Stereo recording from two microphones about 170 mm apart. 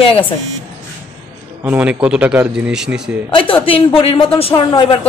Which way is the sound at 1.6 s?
10° right (ahead or behind).